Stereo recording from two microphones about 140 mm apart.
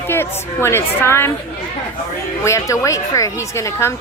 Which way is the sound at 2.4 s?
20° left (ahead or behind).